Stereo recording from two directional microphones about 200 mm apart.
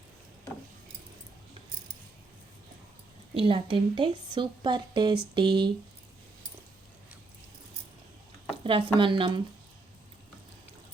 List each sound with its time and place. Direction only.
3.3 s speech: 25° right (ahead or behind)
8.6 s speech: 25° right (ahead or behind)